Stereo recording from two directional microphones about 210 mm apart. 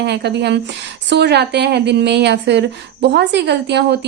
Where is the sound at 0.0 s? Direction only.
55° right (ahead or behind).